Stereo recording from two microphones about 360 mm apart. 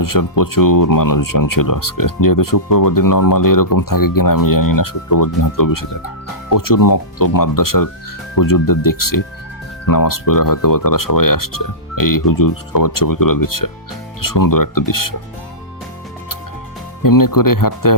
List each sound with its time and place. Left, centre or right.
0.0 s speech: left
17.0 s speech: left